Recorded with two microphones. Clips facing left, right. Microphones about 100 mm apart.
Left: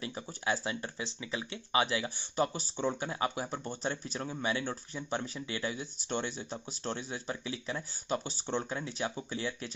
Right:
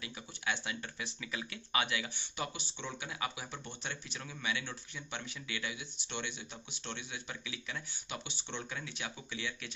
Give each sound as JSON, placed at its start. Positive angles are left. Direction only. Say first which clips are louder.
{"t": 0.0, "sound": "speech", "louder": "left 5 dB", "side_deg": 35}